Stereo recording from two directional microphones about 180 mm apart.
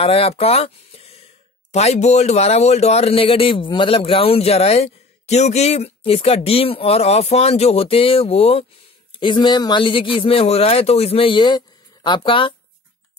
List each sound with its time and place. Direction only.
0.0 s a man's voice: 30° left (ahead or behind)